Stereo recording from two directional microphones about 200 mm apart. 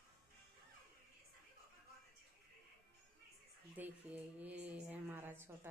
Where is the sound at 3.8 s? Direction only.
10° right (ahead or behind).